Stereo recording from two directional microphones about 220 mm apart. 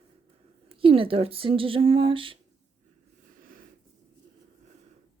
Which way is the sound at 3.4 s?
40° right (ahead or behind).